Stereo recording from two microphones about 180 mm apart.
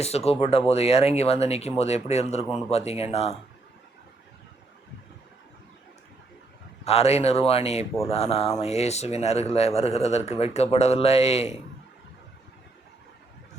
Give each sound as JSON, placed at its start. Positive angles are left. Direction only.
{"t": 0.0, "sound": "speech", "side_deg": 35}
{"t": 6.8, "sound": "speech", "side_deg": 35}